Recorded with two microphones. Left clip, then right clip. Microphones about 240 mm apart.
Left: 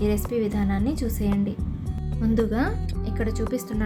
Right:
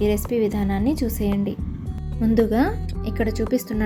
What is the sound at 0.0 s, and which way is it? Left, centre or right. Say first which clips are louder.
Speech: right 4 dB; centre.